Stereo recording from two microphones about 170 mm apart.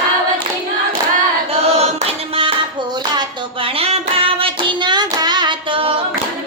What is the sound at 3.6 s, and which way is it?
Hands, 35° right (ahead or behind).